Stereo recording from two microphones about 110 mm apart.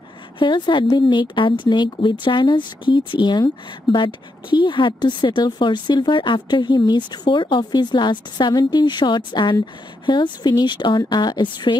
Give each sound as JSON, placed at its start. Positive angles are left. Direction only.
{"t": 0.4, "sound": "a woman's voice", "side_deg": 45}